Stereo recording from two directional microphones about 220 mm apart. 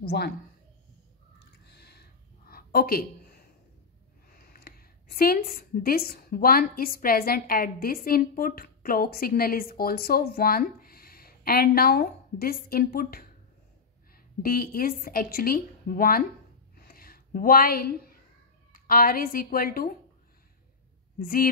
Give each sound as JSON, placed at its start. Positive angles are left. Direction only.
{"t": 0.0, "sound": "speech", "side_deg": 45}
{"t": 1.7, "sound": "a sound", "side_deg": 50}
{"t": 4.3, "sound": "a woman's voice", "side_deg": 45}
{"t": 16.7, "sound": "a sound", "side_deg": 45}
{"t": 18.7, "sound": "speech", "side_deg": 40}
{"t": 21.2, "sound": "a woman's voice", "side_deg": 40}